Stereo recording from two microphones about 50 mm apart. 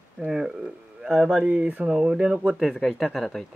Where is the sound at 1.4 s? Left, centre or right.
Right.